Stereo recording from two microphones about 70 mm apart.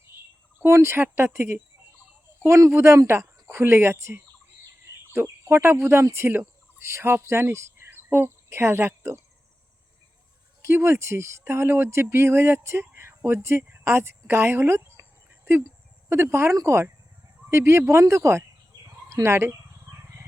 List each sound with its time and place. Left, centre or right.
0.6 s speech: right
10.6 s speech: right
16.0 s speech: right
18.0 s bird: right